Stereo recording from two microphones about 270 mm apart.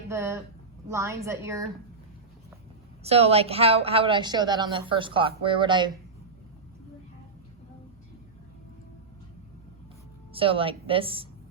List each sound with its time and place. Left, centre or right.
0.1 s a woman's voice: centre
3.0 s a woman's voice: right
10.3 s a woman's voice: centre